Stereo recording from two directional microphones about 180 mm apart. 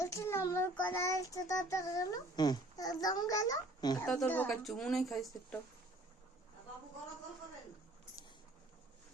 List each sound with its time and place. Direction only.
0.0 s child singing: 15° left (ahead or behind)
0.9 s a child's voice: 15° left (ahead or behind)
4.0 s speech: centre (ahead or behind)